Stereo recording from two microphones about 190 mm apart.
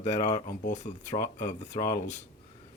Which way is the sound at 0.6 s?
40° left (ahead or behind).